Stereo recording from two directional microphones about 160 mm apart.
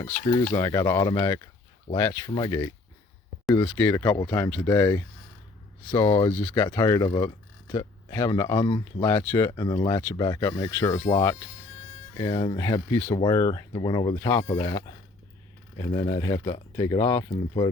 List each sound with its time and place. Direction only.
0.4 s speech: 15° left (ahead or behind)
3.5 s speech: 10° left (ahead or behind)
6.1 s speech: 30° left (ahead or behind)
6.7 s speech: 20° left (ahead or behind)
9.0 s speech: 10° left (ahead or behind)
9.5 s speech: 25° left (ahead or behind)
13.1 s speech: 25° left (ahead or behind)